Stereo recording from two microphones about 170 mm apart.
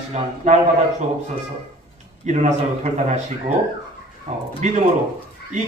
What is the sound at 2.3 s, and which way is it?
Speech, 40° right (ahead or behind).